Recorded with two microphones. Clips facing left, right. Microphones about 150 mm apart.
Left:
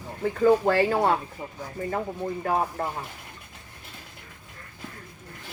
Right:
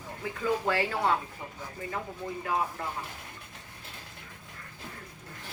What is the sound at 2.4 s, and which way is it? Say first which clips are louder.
Speech: left 5 dB; 45° left (ahead or behind).